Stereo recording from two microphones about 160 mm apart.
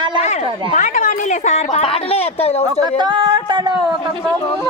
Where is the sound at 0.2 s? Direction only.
45° left (ahead or behind).